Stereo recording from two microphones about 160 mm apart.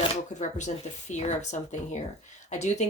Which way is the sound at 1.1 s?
45° left (ahead or behind).